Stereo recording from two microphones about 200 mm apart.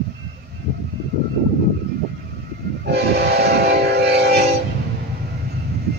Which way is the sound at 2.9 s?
55° right (ahead or behind).